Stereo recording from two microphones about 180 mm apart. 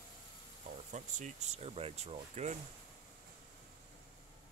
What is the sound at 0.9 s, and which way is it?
Speech, 40° right (ahead or behind).